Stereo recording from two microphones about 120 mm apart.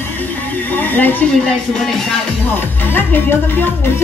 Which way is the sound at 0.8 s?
15° left (ahead or behind).